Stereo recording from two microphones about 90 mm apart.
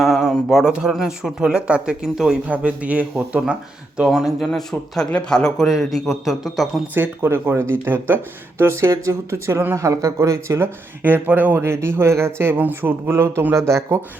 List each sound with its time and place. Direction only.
0.0 s speech: centre (ahead or behind)
4.4 s a man's voice: 5° left (ahead or behind)
6.9 s speech: 25° right (ahead or behind)
11.0 s speech: 20° right (ahead or behind)